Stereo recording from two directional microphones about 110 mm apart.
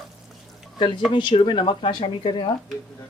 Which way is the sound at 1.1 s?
50° left (ahead or behind).